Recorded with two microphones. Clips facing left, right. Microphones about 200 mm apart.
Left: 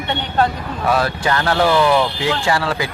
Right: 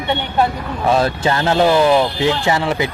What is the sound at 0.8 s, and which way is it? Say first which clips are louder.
Speech: right 2 dB; 25° right (ahead or behind).